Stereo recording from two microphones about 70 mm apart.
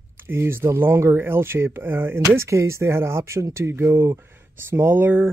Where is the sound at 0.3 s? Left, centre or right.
Right.